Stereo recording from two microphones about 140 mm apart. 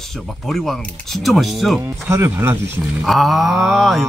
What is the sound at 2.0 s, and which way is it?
Speech, 20° right (ahead or behind).